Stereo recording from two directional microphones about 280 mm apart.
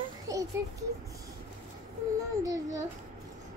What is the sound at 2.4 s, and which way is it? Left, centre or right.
Female singing, centre.